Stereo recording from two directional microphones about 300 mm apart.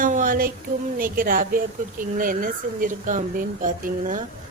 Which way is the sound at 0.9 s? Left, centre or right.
Right.